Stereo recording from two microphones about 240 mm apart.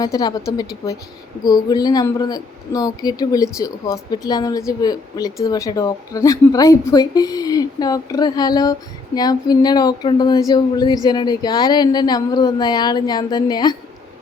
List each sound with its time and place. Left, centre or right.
0.0 s a woman's voice: centre